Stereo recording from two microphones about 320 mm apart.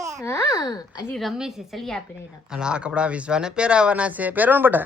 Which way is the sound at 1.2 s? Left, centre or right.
Centre.